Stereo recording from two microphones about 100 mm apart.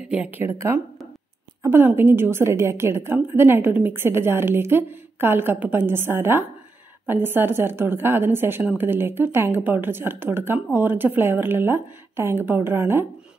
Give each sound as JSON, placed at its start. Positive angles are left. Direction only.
{"t": 0.1, "sound": "speech", "side_deg": -10}
{"t": 0.4, "sound": "a woman's voice", "side_deg": -25}